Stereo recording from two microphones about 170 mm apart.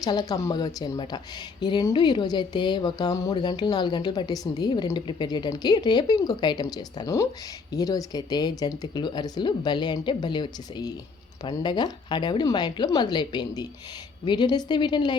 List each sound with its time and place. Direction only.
0.0 s speech: 25° left (ahead or behind)